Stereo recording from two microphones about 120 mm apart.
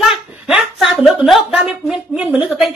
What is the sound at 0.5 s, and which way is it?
A woman's voice, 5° right (ahead or behind).